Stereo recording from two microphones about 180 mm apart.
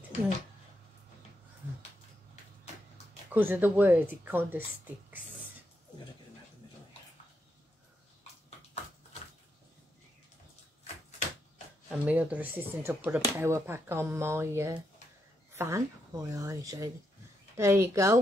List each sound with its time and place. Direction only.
3.3 s speech: 10° right (ahead or behind)
11.9 s speech: 10° right (ahead or behind)